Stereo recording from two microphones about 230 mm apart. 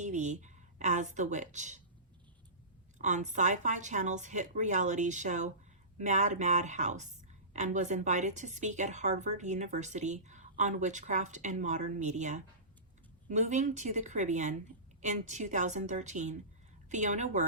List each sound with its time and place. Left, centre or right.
0.0 s speech: right
3.0 s speech: right